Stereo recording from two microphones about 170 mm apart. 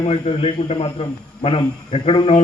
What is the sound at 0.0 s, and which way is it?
A man's voice, 35° left (ahead or behind).